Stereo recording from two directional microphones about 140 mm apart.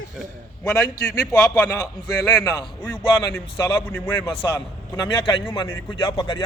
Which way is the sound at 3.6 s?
35° left (ahead or behind).